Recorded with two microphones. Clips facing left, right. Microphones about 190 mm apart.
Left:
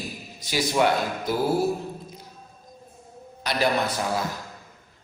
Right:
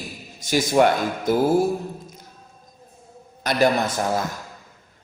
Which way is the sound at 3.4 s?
45° right (ahead or behind).